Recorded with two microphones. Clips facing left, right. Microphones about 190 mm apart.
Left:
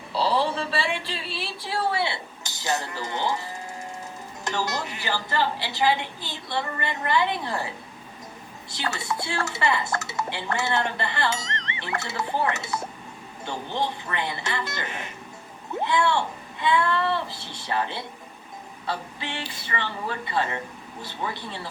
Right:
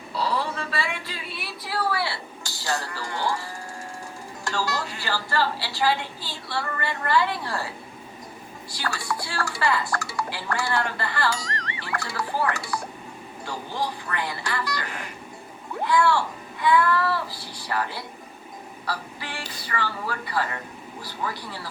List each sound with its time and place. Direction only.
0.1 s a sound: 30° left (ahead or behind)
4.4 s speech: 20° left (ahead or behind)
8.7 s speech: 20° left (ahead or behind)